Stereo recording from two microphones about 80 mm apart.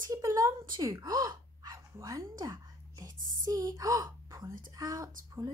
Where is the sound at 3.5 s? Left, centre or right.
Right.